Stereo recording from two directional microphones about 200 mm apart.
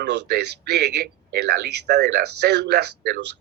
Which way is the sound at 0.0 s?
55° right (ahead or behind).